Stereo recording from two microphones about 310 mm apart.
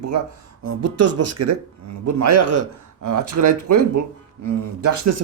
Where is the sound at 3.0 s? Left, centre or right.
Right.